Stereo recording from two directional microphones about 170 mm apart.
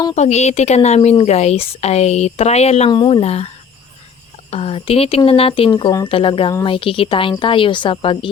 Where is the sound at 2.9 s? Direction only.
25° left (ahead or behind).